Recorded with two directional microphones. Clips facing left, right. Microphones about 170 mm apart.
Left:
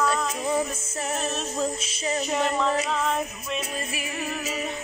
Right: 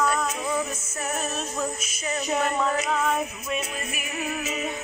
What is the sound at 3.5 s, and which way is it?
Music, 30° left (ahead or behind).